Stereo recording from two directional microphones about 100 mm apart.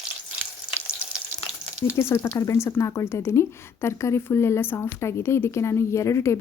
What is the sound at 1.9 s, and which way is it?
A woman's voice, 25° left (ahead or behind).